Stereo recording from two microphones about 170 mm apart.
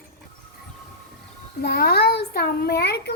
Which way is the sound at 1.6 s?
65° left (ahead or behind).